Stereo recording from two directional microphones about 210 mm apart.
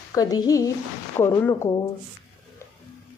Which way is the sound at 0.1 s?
15° left (ahead or behind).